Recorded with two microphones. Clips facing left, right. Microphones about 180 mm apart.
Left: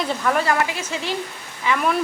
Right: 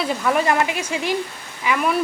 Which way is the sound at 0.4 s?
20° right (ahead or behind).